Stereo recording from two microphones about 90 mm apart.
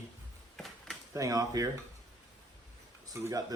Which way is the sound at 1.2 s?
40° right (ahead or behind).